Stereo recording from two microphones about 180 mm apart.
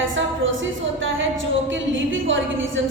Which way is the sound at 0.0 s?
90° right.